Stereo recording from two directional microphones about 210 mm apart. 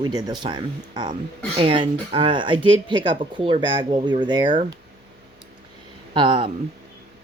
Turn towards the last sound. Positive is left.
turn(degrees=-25)  # may be behind; listen again after turning